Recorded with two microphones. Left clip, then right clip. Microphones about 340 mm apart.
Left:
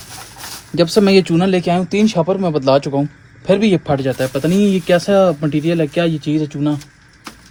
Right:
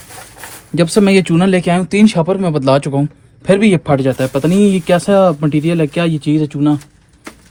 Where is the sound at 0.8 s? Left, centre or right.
Centre.